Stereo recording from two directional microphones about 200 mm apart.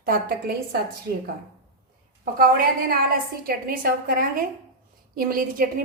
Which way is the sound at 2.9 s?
45° right (ahead or behind).